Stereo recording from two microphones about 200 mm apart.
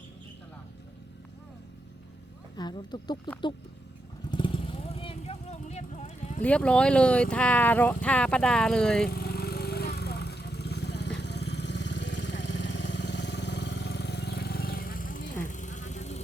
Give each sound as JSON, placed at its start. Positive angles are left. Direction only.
{"t": 2.6, "sound": "speech", "side_deg": 20}
{"t": 4.3, "sound": "vehicle", "side_deg": 25}
{"t": 6.4, "sound": "speech", "side_deg": 5}
{"t": 9.0, "sound": "vehicle", "side_deg": 50}